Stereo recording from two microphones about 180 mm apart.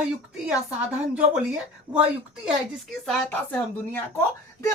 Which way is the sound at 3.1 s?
5° left (ahead or behind).